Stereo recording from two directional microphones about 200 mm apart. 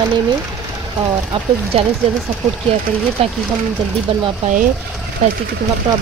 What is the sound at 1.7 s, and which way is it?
Speech, 30° right (ahead or behind).